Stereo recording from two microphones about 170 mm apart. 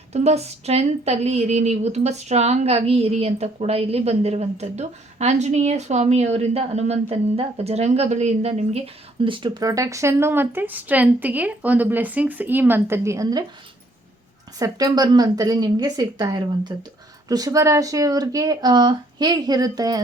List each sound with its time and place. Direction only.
0.1 s speech: 40° right (ahead or behind); by 13.4 s 15° right (ahead or behind)
14.6 s speech: 20° right (ahead or behind)